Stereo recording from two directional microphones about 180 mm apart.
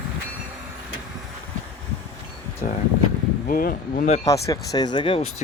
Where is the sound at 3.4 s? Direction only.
55° left (ahead or behind).